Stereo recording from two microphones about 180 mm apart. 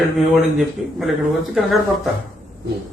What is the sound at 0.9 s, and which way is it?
Speech, centre (ahead or behind).